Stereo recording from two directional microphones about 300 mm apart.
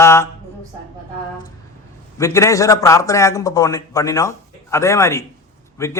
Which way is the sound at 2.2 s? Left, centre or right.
Centre.